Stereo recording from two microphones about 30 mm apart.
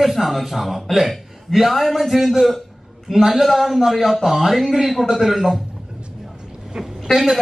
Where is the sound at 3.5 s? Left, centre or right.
Centre.